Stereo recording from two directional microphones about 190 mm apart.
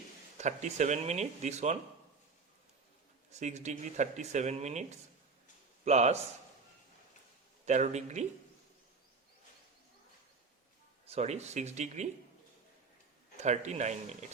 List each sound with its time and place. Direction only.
0.3 s speech: 40° right (ahead or behind)
3.3 s speech: 35° right (ahead or behind)
7.6 s speech: 40° right (ahead or behind)
11.0 s speech: 35° right (ahead or behind)
13.3 s speech: 35° right (ahead or behind)